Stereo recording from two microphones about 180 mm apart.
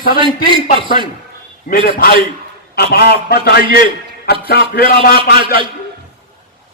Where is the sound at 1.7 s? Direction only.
50° left (ahead or behind).